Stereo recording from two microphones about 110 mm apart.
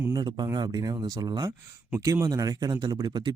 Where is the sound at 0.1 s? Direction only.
40° right (ahead or behind).